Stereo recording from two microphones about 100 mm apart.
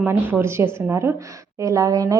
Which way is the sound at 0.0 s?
20° right (ahead or behind).